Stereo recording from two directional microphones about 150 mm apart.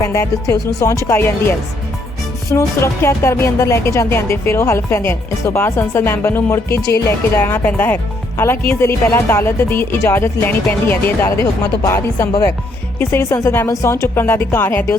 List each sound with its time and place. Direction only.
0.0 s speech: 20° left (ahead or behind)